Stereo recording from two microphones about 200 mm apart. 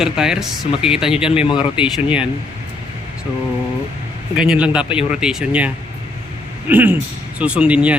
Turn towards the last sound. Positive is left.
turn(degrees=-5)  # may be behind; listen again after turning